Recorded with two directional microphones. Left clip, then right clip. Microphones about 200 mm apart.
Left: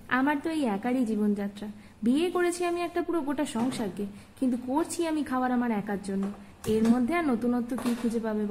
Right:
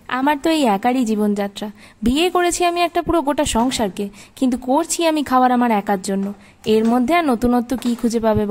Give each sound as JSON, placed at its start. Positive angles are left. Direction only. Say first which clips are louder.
{"t": 0.1, "sound": "a woman's voice", "louder": "right 10 dB", "side_deg": -55}